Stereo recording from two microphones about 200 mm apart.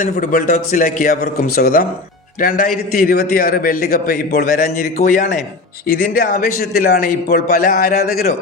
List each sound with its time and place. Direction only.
0.0 s a man's voice: 40° left (ahead or behind)